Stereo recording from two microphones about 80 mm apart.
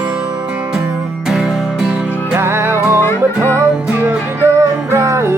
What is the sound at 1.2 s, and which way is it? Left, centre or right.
Music, centre.